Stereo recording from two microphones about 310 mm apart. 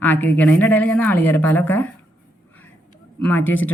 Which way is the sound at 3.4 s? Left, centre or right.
Left.